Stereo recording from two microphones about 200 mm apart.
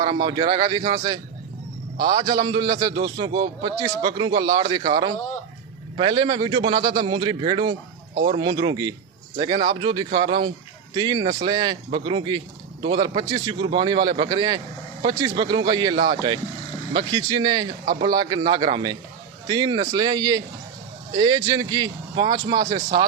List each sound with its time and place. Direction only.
0.0 s a man's voice: 20° right (ahead or behind)